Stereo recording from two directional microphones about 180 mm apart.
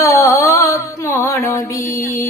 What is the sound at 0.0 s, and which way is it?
Mantra, 15° left (ahead or behind).